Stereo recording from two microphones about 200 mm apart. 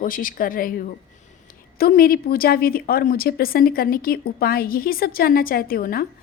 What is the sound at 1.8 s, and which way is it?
A woman's voice, 45° left (ahead or behind).